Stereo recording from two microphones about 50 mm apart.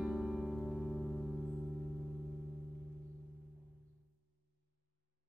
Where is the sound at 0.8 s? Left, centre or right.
Centre.